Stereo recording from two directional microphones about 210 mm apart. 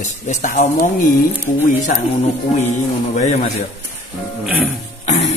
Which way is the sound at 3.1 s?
35° left (ahead or behind).